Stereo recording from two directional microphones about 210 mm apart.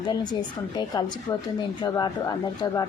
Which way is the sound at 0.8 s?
20° left (ahead or behind).